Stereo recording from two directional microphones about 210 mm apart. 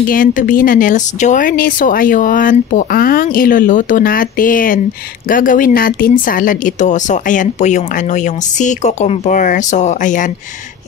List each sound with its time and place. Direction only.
0.1 s speech: 40° left (ahead or behind)